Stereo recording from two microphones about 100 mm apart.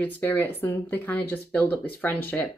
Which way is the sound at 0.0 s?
20° left (ahead or behind).